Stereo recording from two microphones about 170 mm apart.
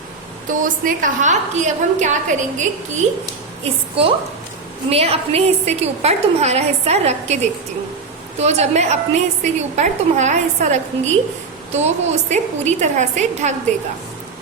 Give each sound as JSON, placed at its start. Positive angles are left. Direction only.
{"t": 0.6, "sound": "a woman's voice", "side_deg": -50}
{"t": 3.6, "sound": "a woman's voice", "side_deg": -35}
{"t": 8.4, "sound": "a woman's voice", "side_deg": -40}